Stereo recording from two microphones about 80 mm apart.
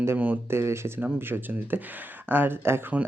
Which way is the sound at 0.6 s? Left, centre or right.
Right.